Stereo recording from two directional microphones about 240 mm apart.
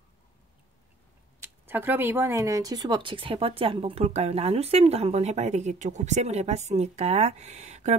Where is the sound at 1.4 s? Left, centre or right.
Centre.